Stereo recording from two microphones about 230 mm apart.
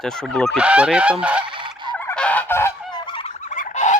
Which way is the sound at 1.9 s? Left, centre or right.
Centre.